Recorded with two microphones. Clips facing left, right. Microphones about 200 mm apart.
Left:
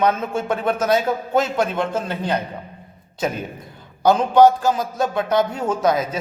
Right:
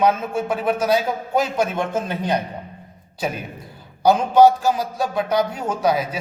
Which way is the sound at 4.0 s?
15° right (ahead or behind).